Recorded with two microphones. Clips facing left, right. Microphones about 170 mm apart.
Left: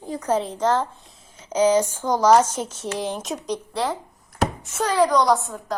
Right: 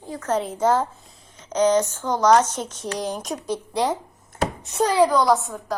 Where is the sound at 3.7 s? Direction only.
20° right (ahead or behind).